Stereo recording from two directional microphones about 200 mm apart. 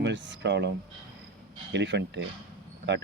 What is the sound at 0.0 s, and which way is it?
Speech, 60° right (ahead or behind).